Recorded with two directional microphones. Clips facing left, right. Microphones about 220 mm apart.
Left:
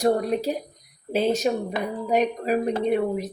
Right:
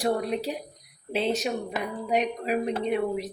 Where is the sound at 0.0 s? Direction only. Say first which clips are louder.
Left 5 dB; 45° left (ahead or behind).